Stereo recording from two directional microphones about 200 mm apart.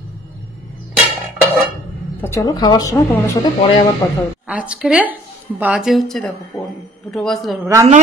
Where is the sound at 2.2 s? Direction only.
15° left (ahead or behind).